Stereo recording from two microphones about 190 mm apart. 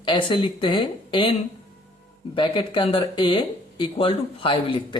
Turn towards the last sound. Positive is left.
turn(degrees=30)  # may be behind; listen again after turning